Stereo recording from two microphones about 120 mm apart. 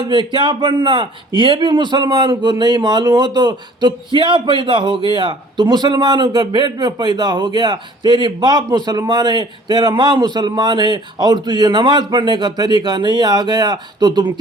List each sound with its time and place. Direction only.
0.0 s speech: 40° right (ahead or behind)